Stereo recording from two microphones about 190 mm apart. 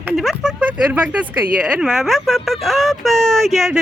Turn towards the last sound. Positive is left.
turn(degrees=0)  # may be behind; listen again after turning